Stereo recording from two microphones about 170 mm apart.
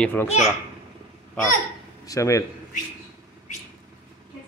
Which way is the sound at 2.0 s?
20° left (ahead or behind).